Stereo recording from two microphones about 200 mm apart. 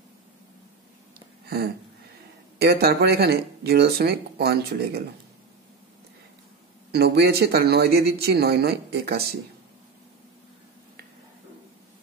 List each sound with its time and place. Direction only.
2.6 s speech: 55° right (ahead or behind)
6.9 s speech: 55° right (ahead or behind)